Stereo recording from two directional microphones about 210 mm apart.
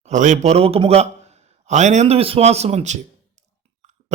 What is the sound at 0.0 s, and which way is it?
A man's voice, 35° right (ahead or behind).